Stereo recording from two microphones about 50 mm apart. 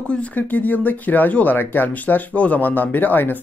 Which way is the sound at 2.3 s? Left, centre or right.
Left.